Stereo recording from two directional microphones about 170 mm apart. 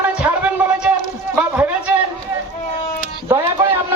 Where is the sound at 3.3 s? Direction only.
15° right (ahead or behind).